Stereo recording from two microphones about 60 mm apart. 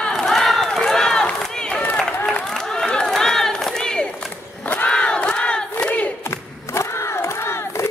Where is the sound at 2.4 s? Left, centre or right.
Centre.